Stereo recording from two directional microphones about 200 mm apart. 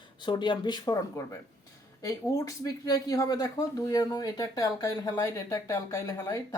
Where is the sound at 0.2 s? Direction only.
20° left (ahead or behind).